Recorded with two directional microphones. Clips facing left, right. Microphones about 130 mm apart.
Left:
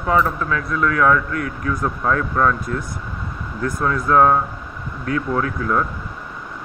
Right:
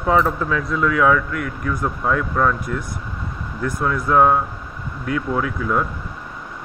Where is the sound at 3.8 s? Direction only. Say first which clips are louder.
Left 1 dB; 10° right (ahead or behind).